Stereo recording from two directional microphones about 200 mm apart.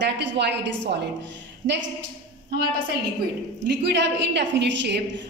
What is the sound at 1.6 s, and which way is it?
Speech, 65° right (ahead or behind).